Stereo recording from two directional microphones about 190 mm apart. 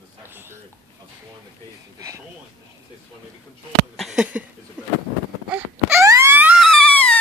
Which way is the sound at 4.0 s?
5° right (ahead or behind).